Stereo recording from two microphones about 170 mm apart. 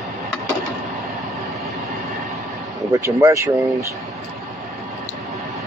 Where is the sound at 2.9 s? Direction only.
15° right (ahead or behind).